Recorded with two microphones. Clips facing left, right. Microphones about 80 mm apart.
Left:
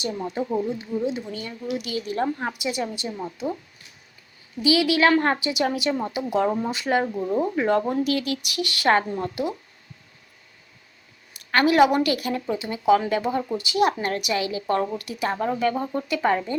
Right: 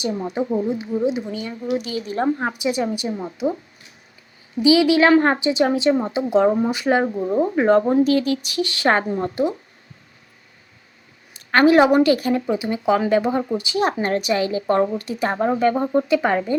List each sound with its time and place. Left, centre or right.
0.3 s a woman's voice: centre
0.9 s speech: right
1.3 s a woman's voice: centre
1.7 s a woman's voice: right
3.1 s speech: right
4.5 s a woman's voice: right
11.3 s a woman's voice: right